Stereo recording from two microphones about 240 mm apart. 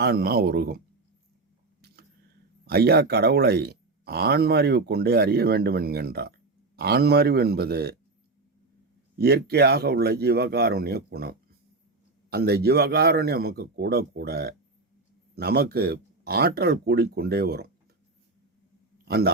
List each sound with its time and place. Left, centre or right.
0.0 s speech: right
2.6 s speech: right
9.1 s speech: right
19.0 s a man's voice: right